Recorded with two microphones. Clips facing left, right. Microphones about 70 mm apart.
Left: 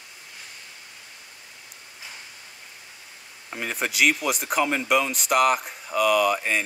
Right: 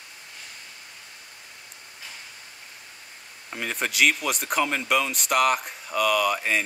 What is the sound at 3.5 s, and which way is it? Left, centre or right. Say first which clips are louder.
Speech: left 1 dB; centre.